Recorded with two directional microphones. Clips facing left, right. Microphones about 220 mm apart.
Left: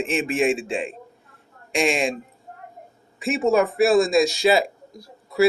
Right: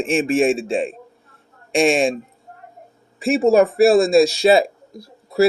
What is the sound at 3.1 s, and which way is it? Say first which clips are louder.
Speech: right 5 dB; 30° right (ahead or behind).